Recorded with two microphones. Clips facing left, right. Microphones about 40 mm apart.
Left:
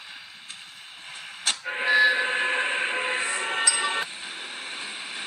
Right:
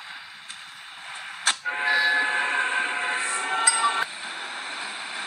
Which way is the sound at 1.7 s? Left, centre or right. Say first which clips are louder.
Left 2 dB; centre.